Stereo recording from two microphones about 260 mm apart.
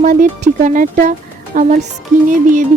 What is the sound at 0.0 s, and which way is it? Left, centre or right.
Speech, right.